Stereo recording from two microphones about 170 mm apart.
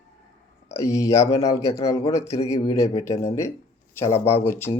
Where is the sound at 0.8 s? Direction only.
15° left (ahead or behind).